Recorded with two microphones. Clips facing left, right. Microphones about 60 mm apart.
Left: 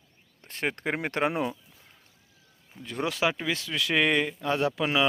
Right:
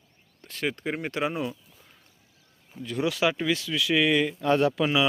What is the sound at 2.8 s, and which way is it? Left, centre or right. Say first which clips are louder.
Speech: right 2 dB; left.